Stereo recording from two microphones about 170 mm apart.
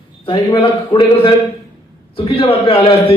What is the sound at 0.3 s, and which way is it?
A man's voice, 30° left (ahead or behind).